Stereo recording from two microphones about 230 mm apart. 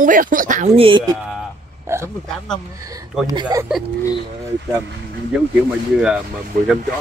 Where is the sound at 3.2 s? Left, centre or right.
Centre.